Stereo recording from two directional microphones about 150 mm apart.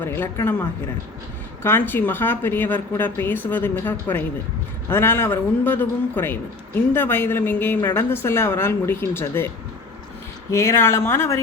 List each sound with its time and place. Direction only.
0.0 s a man's voice: 15° left (ahead or behind)
1.6 s a man's voice: 15° left (ahead or behind)
10.5 s speech: 20° left (ahead or behind)